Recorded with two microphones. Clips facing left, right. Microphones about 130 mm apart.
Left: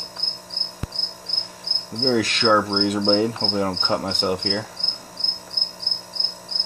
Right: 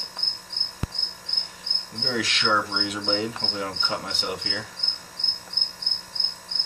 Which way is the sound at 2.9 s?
45° left (ahead or behind).